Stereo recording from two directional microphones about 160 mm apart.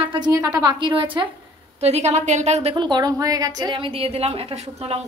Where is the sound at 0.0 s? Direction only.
30° right (ahead or behind).